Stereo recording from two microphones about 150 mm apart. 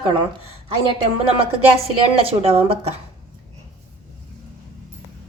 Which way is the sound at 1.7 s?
40° right (ahead or behind).